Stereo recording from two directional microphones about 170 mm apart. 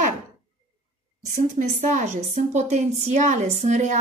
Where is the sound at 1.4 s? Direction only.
45° right (ahead or behind).